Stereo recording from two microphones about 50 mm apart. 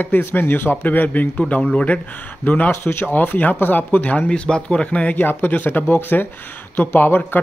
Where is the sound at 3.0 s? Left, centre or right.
Left.